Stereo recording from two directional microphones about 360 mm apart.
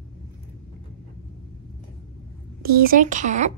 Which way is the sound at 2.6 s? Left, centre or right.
Right.